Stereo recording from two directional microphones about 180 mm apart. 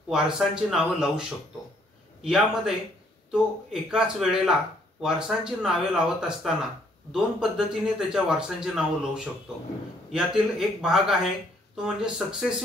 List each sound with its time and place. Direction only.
0.1 s a man's voice: 5° right (ahead or behind)
2.2 s a man's voice: centre (ahead or behind)